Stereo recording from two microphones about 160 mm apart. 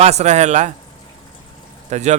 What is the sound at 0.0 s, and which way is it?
Speech, 45° right (ahead or behind).